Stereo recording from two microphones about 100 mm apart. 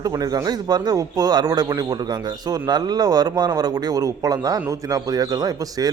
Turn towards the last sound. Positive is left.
turn(degrees=-40)  # may be behind; listen again after turning